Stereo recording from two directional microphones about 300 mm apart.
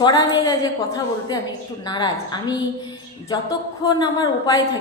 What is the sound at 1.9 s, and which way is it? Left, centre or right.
Speech, centre.